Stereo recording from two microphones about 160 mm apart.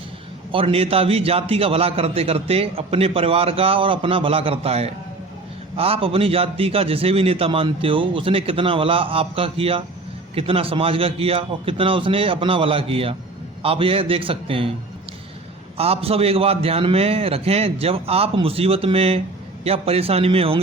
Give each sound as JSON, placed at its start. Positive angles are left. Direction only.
{"t": 0.5, "sound": "a man's voice", "side_deg": -35}
{"t": 15.8, "sound": "a man's voice", "side_deg": -40}